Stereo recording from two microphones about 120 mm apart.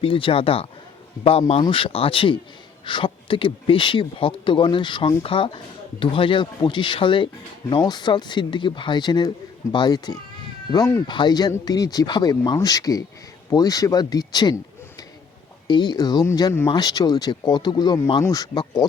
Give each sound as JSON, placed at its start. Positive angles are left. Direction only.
{"t": 0.0, "sound": "speech", "side_deg": 45}
{"t": 11.0, "sound": "speech", "side_deg": 40}
{"t": 15.6, "sound": "speech", "side_deg": 40}